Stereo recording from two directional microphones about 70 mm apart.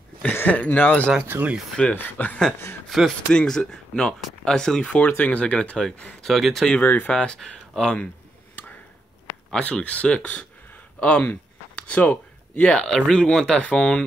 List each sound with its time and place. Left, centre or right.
0.3 s speech: left
1.2 s speech: right
2.0 s speech: left
2.9 s speech: centre
6.2 s speech: centre
6.8 s speech: left
7.1 s speech: centre
9.5 s speech: centre
11.0 s a sound: centre
12.8 s speech: centre